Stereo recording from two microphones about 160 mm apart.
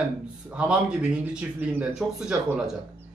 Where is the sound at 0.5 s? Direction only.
5° right (ahead or behind).